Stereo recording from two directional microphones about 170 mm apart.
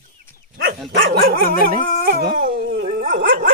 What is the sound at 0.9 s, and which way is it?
Dog, 70° right (ahead or behind).